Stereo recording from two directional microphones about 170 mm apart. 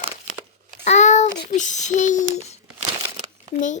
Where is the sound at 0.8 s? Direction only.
45° left (ahead or behind).